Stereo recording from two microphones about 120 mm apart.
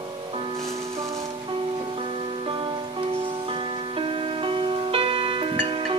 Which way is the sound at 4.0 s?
45° right (ahead or behind).